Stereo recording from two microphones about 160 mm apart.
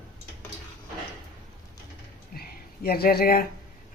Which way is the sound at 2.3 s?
70° left (ahead or behind).